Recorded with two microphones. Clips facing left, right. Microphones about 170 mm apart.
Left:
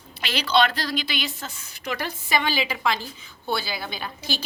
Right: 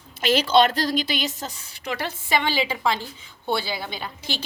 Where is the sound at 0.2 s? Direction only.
45° right (ahead or behind).